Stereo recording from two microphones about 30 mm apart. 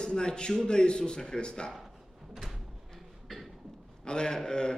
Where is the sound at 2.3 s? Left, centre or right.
Centre.